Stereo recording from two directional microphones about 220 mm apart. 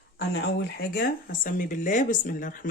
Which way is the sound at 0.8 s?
40° left (ahead or behind).